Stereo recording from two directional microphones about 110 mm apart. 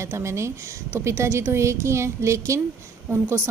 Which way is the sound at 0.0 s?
25° right (ahead or behind).